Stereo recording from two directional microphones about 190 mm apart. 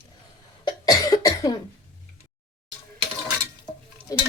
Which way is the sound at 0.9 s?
20° left (ahead or behind).